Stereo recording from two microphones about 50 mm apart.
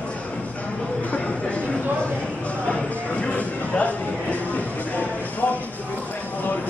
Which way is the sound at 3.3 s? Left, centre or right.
Left.